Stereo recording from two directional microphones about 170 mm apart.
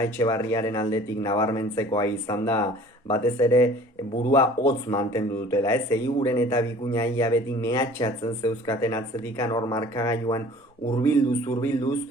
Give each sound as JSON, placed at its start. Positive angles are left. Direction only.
{"t": 0.0, "sound": "speech", "side_deg": 15}